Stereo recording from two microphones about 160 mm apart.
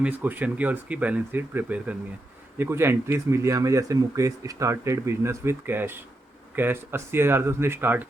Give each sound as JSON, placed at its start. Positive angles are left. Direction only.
{"t": 0.0, "sound": "speech", "side_deg": -10}